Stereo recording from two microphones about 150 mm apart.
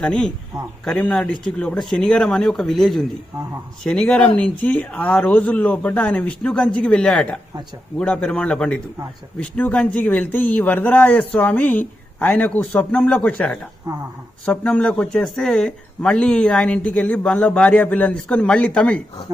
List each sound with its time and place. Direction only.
0.0 s speech: 5° left (ahead or behind)
13.9 s a woman's voice: 25° right (ahead or behind)
14.4 s speech: 10° left (ahead or behind)